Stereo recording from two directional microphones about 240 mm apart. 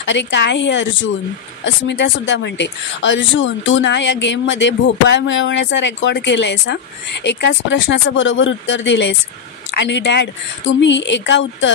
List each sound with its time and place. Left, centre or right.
0.0 s speech: left